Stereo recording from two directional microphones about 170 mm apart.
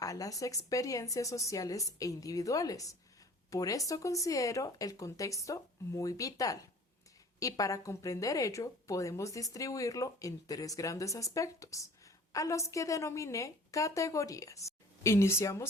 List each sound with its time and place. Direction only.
0.0 s a woman's voice: 20° left (ahead or behind)